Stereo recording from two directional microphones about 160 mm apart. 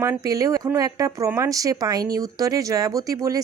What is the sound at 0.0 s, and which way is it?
Speech, 20° right (ahead or behind).